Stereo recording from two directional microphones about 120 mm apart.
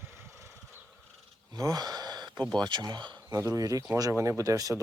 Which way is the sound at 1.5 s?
30° right (ahead or behind).